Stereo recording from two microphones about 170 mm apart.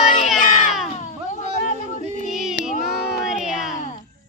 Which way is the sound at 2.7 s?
Centre (ahead or behind).